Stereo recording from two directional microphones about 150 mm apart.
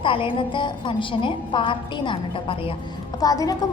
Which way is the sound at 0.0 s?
35° left (ahead or behind).